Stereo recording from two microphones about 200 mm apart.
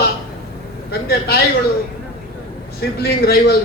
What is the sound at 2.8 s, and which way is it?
Speech, 50° left (ahead or behind).